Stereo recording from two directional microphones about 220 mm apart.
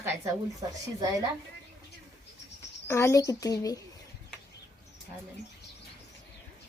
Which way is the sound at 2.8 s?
15° left (ahead or behind).